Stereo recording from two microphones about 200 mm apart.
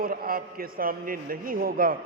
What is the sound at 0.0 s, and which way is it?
A man's voice, 45° right (ahead or behind).